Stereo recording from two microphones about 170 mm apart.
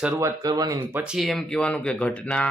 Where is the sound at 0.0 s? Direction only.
15° right (ahead or behind).